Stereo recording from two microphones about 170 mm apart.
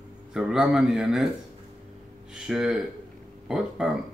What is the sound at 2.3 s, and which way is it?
Speech, 5° right (ahead or behind).